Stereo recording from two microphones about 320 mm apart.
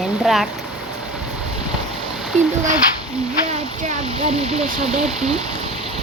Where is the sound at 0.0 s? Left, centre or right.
Centre.